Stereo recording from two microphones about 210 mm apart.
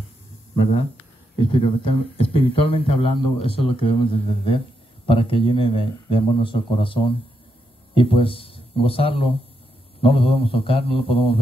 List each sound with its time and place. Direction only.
1.4 s speech: 25° left (ahead or behind)